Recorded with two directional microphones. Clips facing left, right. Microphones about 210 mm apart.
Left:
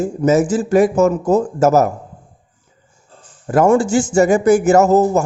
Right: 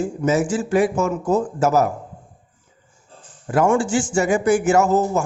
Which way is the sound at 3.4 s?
40° left (ahead or behind).